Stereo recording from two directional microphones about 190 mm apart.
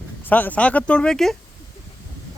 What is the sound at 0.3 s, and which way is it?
Speech, 10° left (ahead or behind).